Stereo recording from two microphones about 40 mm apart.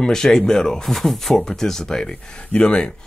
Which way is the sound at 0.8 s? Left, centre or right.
Centre.